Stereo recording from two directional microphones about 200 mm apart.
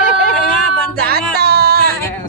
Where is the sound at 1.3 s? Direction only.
55° right (ahead or behind).